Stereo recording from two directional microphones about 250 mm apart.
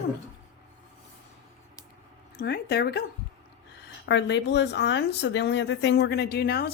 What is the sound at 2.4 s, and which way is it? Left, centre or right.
Speech, left.